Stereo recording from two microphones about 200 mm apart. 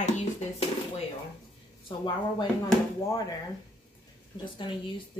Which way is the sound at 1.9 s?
25° left (ahead or behind).